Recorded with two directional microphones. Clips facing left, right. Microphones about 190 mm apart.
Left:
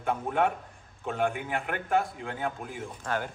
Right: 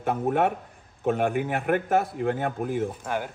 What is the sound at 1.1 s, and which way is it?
A man's voice, 60° right (ahead or behind).